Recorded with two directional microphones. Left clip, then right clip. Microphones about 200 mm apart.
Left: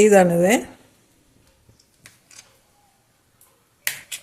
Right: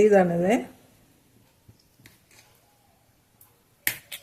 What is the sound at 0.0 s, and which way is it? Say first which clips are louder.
Speech: left 5 dB; 35° left (ahead or behind).